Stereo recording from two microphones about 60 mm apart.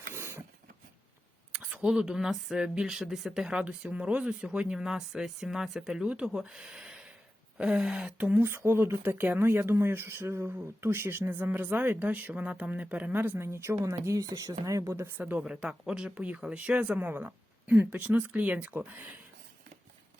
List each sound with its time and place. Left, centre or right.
0.1 s a sound: right
1.5 s a sound: right
1.9 s speech: centre
3.5 s speech: centre
5.9 s speech: centre
8.2 s speech: right
8.4 s speech: right
9.0 s speech: right
13.1 s speech: right
15.4 s speech: centre
16.1 s speech: right
17.0 s speech: right
17.7 s speech: right